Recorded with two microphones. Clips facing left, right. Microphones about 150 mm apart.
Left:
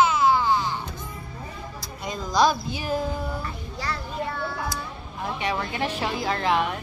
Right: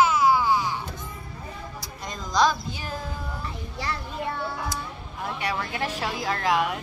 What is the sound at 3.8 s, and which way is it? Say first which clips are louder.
Children playing: left 1 dB; 20° right (ahead or behind).